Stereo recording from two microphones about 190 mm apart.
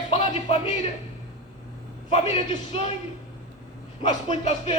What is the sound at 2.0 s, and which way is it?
Speech, 30° left (ahead or behind).